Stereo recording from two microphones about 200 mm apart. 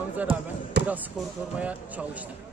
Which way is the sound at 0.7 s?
60° right (ahead or behind).